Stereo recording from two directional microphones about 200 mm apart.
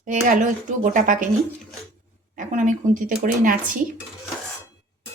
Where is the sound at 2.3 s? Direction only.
40° right (ahead or behind).